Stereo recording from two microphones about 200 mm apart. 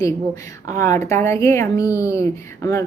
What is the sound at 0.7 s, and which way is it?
Speech, 15° left (ahead or behind).